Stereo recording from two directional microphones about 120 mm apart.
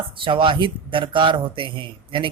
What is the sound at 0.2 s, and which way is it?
A man's voice, 45° right (ahead or behind).